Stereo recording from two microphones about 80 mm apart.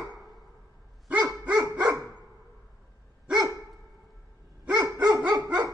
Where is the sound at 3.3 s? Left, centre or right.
Right.